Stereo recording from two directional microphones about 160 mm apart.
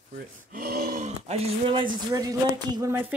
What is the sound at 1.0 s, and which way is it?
Speech, 40° right (ahead or behind).